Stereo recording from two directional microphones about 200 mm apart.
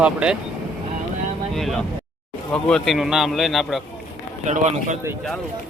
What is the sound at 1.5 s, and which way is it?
A man's voice, centre (ahead or behind).